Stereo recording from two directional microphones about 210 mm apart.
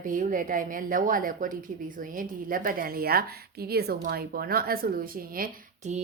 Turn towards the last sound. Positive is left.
turn(degrees=-40)  # may be behind; listen again after turning